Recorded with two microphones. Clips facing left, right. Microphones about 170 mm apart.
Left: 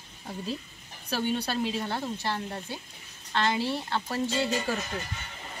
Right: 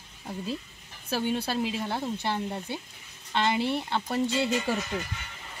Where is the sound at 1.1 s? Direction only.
5° right (ahead or behind).